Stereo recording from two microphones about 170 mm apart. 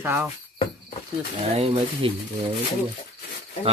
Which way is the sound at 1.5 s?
35° right (ahead or behind).